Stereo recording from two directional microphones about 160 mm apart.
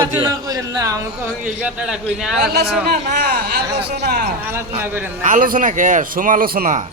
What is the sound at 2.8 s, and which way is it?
Speech, 80° right.